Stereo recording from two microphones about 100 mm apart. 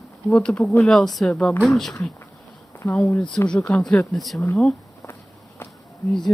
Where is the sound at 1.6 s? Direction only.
Centre (ahead or behind).